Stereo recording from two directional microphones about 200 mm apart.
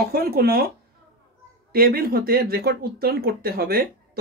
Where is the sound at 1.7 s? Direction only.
50° right (ahead or behind).